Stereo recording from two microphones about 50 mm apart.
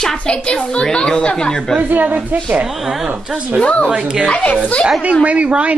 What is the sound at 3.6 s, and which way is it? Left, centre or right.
Speech, left.